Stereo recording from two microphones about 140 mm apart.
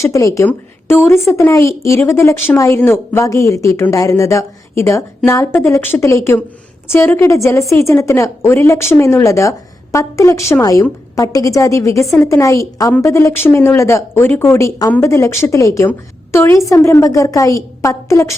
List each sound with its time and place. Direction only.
0.0 s a woman's voice: 20° left (ahead or behind)